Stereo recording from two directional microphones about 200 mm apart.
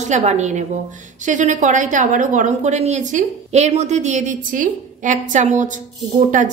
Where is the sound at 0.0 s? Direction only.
35° right (ahead or behind).